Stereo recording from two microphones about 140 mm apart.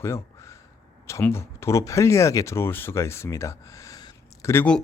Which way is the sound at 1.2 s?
15° left (ahead or behind).